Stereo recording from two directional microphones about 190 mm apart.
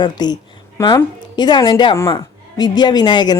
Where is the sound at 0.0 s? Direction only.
20° left (ahead or behind).